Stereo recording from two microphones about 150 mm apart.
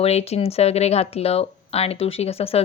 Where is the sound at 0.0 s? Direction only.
45° left (ahead or behind).